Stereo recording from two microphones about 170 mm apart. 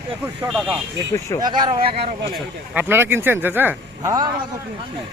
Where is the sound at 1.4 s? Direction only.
25° right (ahead or behind).